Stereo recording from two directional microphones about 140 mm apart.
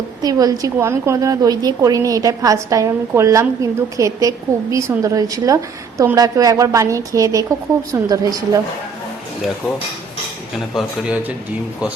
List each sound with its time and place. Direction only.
0.2 s a woman's voice: 25° right (ahead or behind)
10.8 s speech: 10° right (ahead or behind)